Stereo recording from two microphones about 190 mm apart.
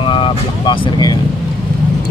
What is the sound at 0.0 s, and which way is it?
Vehicle, 25° left (ahead or behind).